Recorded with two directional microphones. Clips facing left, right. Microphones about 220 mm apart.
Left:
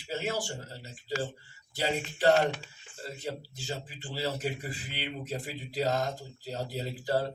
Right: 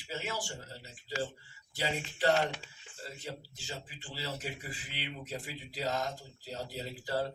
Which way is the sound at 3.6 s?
40° left (ahead or behind).